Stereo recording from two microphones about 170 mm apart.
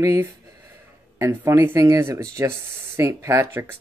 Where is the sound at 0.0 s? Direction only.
15° right (ahead or behind).